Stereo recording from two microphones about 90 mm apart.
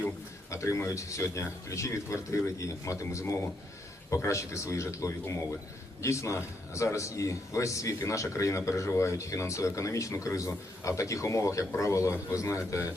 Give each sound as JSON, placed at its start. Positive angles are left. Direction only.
{"t": 0.5, "sound": "a man's voice", "side_deg": 35}